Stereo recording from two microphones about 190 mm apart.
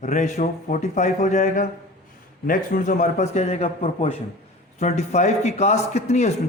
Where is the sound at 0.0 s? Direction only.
40° left (ahead or behind).